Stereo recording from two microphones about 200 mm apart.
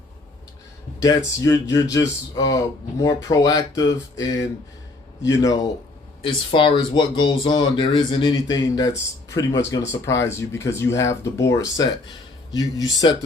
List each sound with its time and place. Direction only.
1.0 s a man's voice: 15° left (ahead or behind)